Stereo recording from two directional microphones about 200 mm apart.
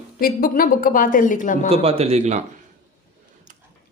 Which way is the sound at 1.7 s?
30° right (ahead or behind).